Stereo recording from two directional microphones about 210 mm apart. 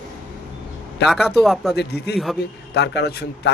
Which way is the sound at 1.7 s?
50° left (ahead or behind).